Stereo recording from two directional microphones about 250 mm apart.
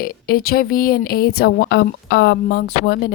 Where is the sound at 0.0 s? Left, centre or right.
Left.